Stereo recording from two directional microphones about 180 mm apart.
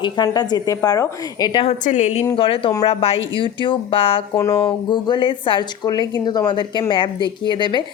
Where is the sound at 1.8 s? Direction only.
40° left (ahead or behind).